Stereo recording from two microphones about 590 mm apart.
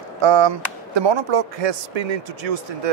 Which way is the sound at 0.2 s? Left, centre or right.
Right.